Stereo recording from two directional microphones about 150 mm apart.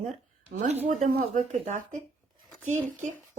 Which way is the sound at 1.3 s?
55° right (ahead or behind).